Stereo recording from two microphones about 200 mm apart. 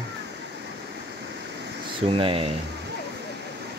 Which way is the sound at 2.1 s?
25° right (ahead or behind).